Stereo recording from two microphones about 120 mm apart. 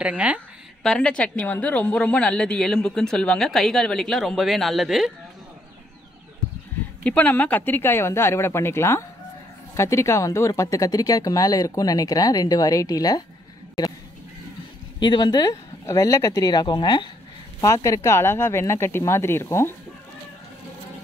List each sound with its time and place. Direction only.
0.0 s speech: 10° right (ahead or behind)
0.8 s a woman's voice: 5° left (ahead or behind)
7.0 s speech: 10° left (ahead or behind); by 13.2 s 30° left (ahead or behind)
15.0 s speech: 40° left (ahead or behind); by 19.7 s 20° left (ahead or behind)